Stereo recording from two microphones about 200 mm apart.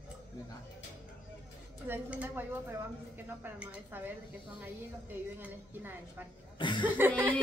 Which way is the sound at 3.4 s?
10° right (ahead or behind).